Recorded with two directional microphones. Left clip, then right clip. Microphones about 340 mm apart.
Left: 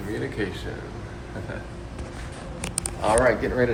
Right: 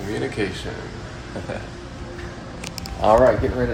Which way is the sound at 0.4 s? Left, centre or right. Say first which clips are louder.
Right 4 dB; centre.